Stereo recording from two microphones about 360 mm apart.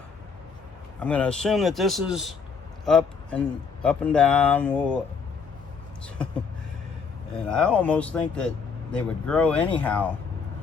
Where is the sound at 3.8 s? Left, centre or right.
Centre.